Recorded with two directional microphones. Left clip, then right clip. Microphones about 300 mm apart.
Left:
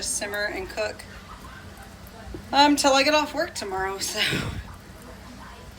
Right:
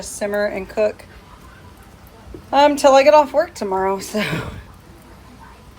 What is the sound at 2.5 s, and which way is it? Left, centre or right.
Music, right.